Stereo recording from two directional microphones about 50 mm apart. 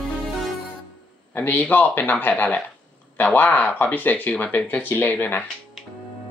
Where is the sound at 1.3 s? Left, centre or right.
Left.